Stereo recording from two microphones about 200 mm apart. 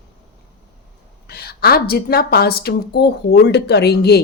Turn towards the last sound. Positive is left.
turn(degrees=55)  # may be behind; listen again after turning